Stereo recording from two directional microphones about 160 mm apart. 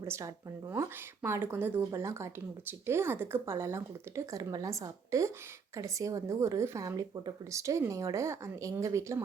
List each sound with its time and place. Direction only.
0.0 s speech: 15° right (ahead or behind)